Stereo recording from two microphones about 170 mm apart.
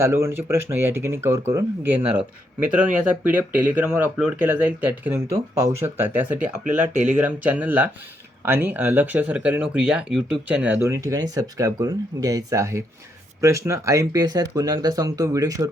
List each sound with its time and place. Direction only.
0.0 s speech: 15° right (ahead or behind)